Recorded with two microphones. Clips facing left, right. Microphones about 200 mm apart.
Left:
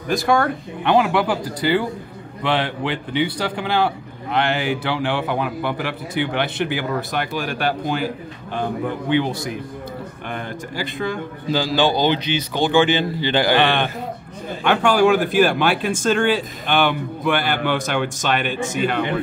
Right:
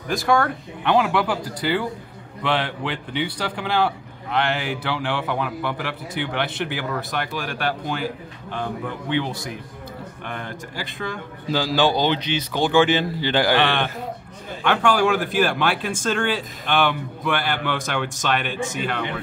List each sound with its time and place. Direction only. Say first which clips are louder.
0.3 s speech: even; 10° left (ahead or behind)
10.2 s speech: left 3 dB; 5° left (ahead or behind)